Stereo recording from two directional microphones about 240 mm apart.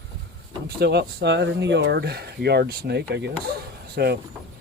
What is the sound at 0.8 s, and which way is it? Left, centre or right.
Speech, right.